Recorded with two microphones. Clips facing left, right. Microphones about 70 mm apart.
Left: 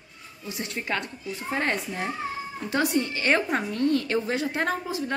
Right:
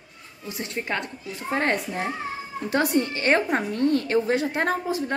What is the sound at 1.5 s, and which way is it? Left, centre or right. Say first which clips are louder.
A woman's voice: right 3 dB; right.